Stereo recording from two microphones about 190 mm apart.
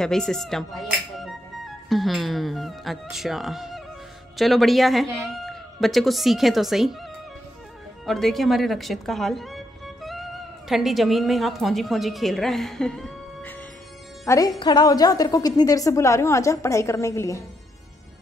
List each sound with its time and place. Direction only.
0.0 s a woman's voice: 5° left (ahead or behind)
10.7 s a woman's voice: centre (ahead or behind); by 17.4 s 15° left (ahead or behind)